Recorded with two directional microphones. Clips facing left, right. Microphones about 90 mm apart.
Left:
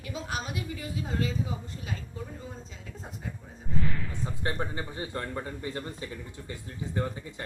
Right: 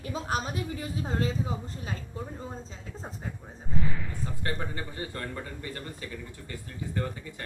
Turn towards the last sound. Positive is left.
turn(degrees=20)  # may be behind; listen again after turning